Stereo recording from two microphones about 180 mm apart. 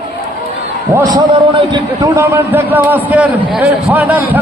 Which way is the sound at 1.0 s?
20° right (ahead or behind).